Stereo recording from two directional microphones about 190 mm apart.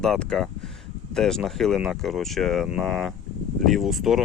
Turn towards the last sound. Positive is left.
turn(degrees=0)  # may be behind; listen again after turning